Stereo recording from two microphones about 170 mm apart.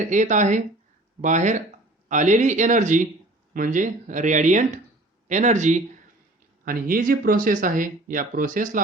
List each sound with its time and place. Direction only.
0.0 s speech: 45° right (ahead or behind)
6.7 s speech: 55° right (ahead or behind)